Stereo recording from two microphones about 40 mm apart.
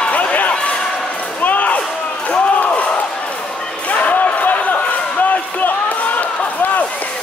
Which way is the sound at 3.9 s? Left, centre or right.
Left.